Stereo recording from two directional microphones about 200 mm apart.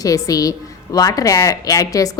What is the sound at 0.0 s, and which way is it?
A woman's voice, 15° left (ahead or behind).